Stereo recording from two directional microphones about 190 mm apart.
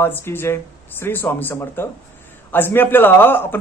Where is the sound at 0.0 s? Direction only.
10° left (ahead or behind).